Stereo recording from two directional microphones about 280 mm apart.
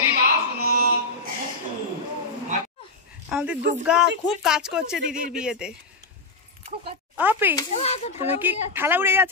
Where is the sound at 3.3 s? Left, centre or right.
Centre.